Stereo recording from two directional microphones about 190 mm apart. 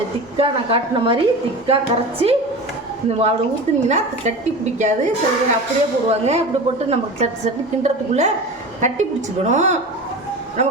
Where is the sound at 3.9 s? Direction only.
40° right (ahead or behind).